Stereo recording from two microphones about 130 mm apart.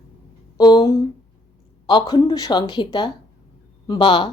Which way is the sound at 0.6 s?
35° left (ahead or behind).